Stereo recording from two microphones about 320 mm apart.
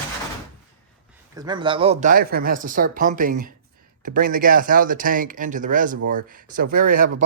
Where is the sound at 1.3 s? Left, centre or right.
Centre.